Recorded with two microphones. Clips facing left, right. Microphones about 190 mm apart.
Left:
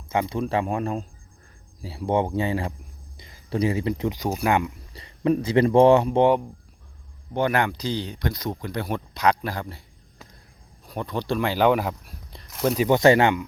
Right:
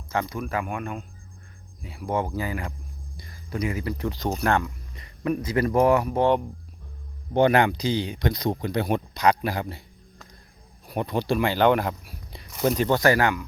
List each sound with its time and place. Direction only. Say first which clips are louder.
0.1 s speech: left 4 dB; 25° left (ahead or behind)
4.9 s speech: left 5 dB; 25° left (ahead or behind)
7.3 s speech: right 4 dB; 25° right (ahead or behind)
9.1 s speech: even; centre (ahead or behind)
9.4 s speech: right 3 dB; 10° right (ahead or behind)
10.8 s speech: right 2 dB; 15° right (ahead or behind)
11.4 s speech: left 1 dB; 5° left (ahead or behind)
12.9 s speech: left 6 dB; 25° left (ahead or behind)